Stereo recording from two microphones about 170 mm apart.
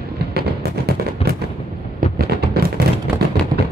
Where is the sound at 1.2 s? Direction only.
35° left (ahead or behind).